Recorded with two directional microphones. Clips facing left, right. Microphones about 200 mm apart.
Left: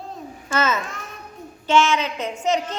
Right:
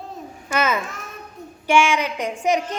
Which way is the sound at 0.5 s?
15° right (ahead or behind).